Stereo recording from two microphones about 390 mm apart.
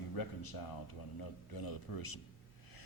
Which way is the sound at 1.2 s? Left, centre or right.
Left.